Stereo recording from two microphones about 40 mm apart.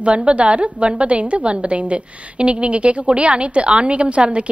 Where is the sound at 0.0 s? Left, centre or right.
Right.